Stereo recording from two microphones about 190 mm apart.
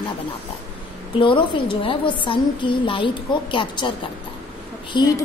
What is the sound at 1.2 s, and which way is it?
A woman's voice, 25° left (ahead or behind).